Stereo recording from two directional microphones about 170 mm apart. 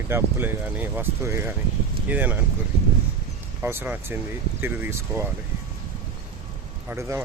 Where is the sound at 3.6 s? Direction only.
15° right (ahead or behind).